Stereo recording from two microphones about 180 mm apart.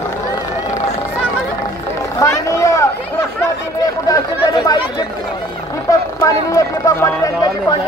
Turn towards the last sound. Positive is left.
turn(degrees=20)  # may be behind; listen again after turning